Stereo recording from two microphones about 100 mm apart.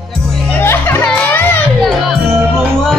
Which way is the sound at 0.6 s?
20° left (ahead or behind).